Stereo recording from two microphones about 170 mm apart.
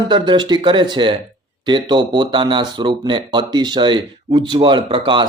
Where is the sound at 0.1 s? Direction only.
25° right (ahead or behind).